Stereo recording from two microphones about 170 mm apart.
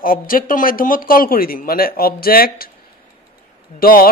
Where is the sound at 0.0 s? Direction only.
55° left (ahead or behind).